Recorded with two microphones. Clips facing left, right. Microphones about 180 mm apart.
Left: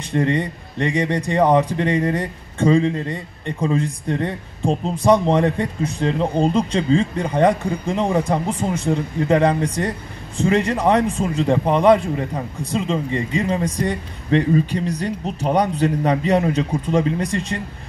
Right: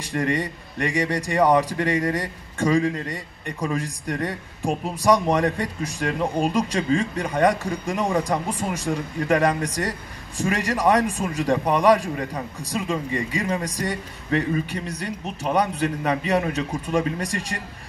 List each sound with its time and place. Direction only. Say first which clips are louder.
0.1 s a man's voice: left 4 dB; 30° left (ahead or behind)